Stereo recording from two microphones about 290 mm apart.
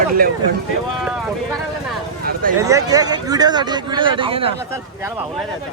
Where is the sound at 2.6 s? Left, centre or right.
Centre.